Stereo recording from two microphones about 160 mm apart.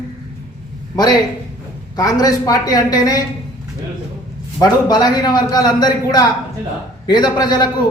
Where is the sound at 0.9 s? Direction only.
25° left (ahead or behind).